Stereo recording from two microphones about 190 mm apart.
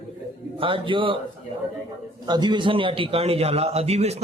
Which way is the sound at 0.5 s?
25° right (ahead or behind).